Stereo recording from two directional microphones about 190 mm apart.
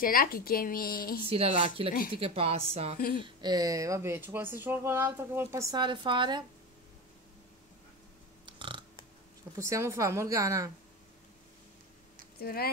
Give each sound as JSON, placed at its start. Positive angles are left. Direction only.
{"t": 0.0, "sound": "speech", "side_deg": 50}
{"t": 1.2, "sound": "a woman's voice", "side_deg": -30}
{"t": 8.5, "sound": "burping", "side_deg": -25}
{"t": 9.6, "sound": "speech", "side_deg": -15}
{"t": 12.4, "sound": "speech", "side_deg": 55}